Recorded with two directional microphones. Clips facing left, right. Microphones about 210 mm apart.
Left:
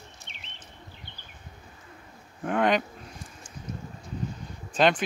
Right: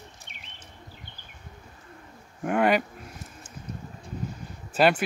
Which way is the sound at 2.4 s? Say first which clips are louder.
Right 2 dB; 5° right (ahead or behind).